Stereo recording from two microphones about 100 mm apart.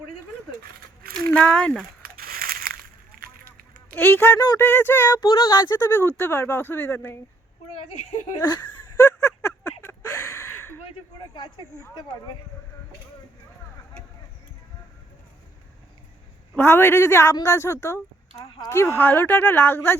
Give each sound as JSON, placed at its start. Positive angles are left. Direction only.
{"t": 1.3, "sound": "speech", "side_deg": 10}
{"t": 3.9, "sound": "speech", "side_deg": 20}
{"t": 5.3, "sound": "speech", "side_deg": 50}
{"t": 5.9, "sound": "speech", "side_deg": 25}
{"t": 8.4, "sound": "speech", "side_deg": 40}
{"t": 9.0, "sound": "a sound", "side_deg": 30}
{"t": 16.6, "sound": "speech", "side_deg": 25}